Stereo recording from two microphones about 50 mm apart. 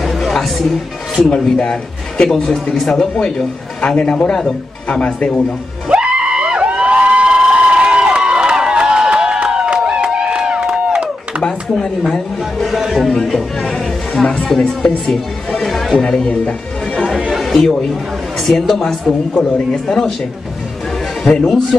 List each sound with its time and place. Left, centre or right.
0.0 s music: centre
1.3 s speech: centre
2.7 s speech: centre
4.8 s speech: left
5.9 s a sound: centre
12.5 s speech: centre
13.2 s speech: centre
13.7 s a sound: centre
14.2 s speech: centre
15.1 s chatter: centre
17.4 s speech: centre
21.2 s speech: centre